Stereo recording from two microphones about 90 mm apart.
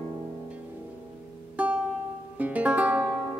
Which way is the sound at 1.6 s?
15° right (ahead or behind).